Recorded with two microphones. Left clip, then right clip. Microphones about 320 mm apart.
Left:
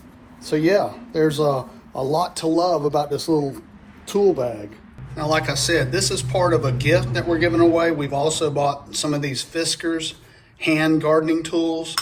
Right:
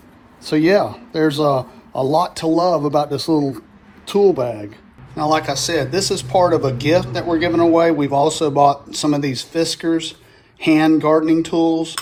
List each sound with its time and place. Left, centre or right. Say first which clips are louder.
0.4 s speech: right 3 dB; right
3.2 s a man's voice: right 3 dB; right
4.0 s speech: right 4 dB; right
5.1 s speech: right 4 dB; centre